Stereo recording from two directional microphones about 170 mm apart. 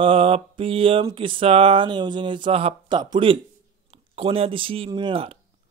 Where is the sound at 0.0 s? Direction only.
35° right (ahead or behind).